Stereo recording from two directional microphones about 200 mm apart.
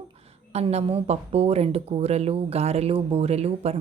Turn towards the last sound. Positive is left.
turn(degrees=-30)  # may be behind; listen again after turning